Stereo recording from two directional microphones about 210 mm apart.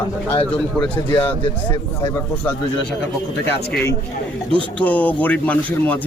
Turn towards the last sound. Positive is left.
turn(degrees=10)  # may be behind; listen again after turning